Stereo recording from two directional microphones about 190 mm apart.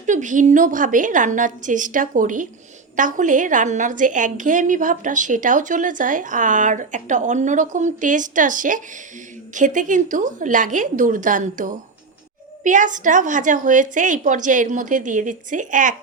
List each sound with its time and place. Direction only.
0.0 s a woman's voice: 40° right (ahead or behind)